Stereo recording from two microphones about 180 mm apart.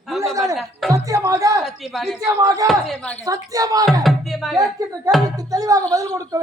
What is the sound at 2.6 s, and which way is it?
Speech, centre (ahead or behind).